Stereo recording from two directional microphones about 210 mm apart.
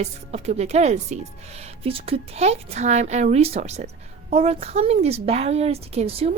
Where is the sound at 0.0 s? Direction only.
30° right (ahead or behind).